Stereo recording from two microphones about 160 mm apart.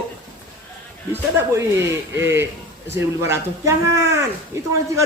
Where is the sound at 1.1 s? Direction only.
15° right (ahead or behind).